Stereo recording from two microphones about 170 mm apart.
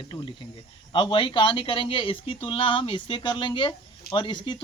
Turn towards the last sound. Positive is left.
turn(degrees=30)  # may be behind; listen again after turning